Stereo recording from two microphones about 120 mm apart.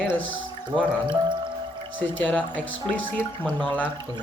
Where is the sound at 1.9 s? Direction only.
15° left (ahead or behind).